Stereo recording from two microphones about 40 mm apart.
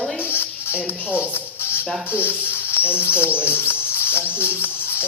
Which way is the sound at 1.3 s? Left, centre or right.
Left.